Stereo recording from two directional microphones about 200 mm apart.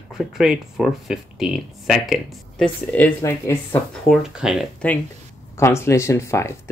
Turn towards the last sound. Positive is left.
turn(degrees=15)  # may be behind; listen again after turning